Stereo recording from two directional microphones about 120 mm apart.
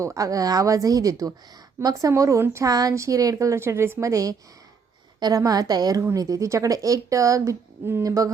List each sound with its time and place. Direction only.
0.0 s a woman's voice: 25° right (ahead or behind)